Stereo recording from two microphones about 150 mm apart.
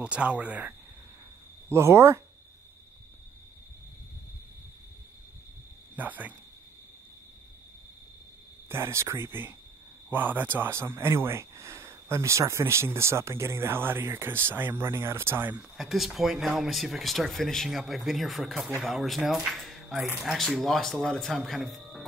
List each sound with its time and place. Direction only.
0.0 s speech: 10° right (ahead or behind)
5.9 s speech: 10° right (ahead or behind)
8.6 s speech: 15° right (ahead or behind)
15.8 s speech: centre (ahead or behind)